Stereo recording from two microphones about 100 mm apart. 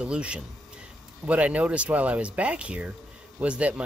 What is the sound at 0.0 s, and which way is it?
Speech, 10° right (ahead or behind).